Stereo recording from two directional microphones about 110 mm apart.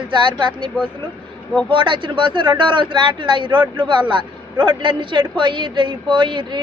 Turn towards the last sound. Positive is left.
turn(degrees=-45)  # may be behind; listen again after turning